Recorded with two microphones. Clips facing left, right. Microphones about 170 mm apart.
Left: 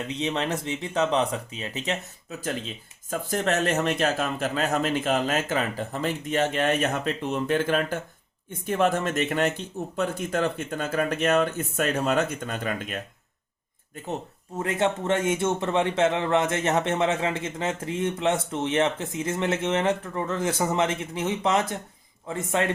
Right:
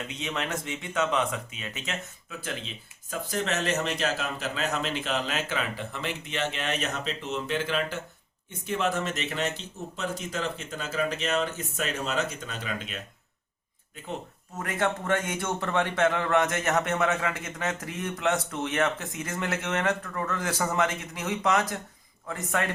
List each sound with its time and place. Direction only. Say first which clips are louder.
0.1 s speech: left 7 dB; 30° left (ahead or behind)
3.1 s a man's voice: left 4 dB; 50° left (ahead or behind)
14.6 s a man's voice: left 4 dB; 25° left (ahead or behind)